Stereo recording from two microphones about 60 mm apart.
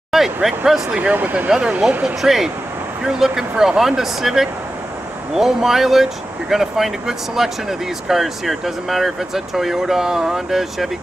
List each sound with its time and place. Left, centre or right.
0.1 s speech: centre
1.1 s speech: right
2.2 s speech: centre